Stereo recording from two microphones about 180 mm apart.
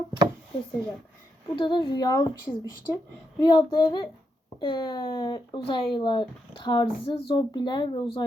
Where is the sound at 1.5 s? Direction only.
25° left (ahead or behind).